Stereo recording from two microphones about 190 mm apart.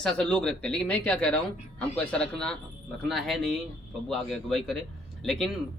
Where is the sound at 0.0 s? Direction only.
5° left (ahead or behind).